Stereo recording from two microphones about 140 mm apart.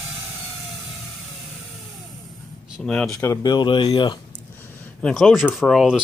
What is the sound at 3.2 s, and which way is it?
Speech, 25° left (ahead or behind).